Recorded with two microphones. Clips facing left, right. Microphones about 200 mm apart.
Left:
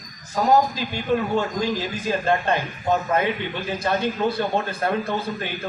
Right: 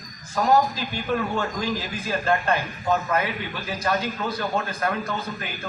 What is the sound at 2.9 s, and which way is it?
A man's voice, 30° left (ahead or behind).